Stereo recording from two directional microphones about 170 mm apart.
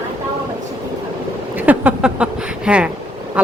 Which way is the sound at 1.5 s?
10° right (ahead or behind).